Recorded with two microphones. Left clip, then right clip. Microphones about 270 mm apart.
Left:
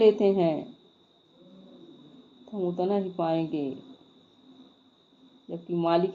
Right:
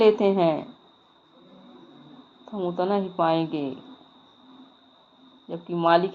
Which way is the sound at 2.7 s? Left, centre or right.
Centre.